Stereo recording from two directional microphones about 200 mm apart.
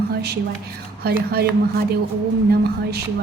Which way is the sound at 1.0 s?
50° right (ahead or behind).